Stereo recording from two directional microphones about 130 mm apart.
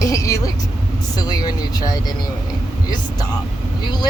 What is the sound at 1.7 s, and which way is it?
Speech, 30° left (ahead or behind).